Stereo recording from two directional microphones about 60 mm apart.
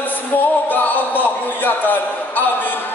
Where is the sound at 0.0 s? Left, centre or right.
Left.